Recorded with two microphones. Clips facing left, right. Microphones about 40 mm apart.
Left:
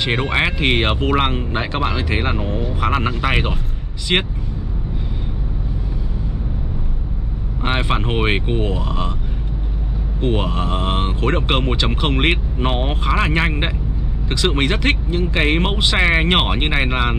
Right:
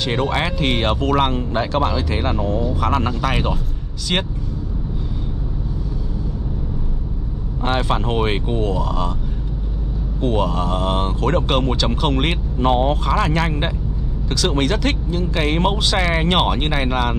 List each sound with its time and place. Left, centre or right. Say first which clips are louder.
0.0 s speech: left 2 dB; left
7.6 s speech: even; left
10.2 s speech: right 1 dB; left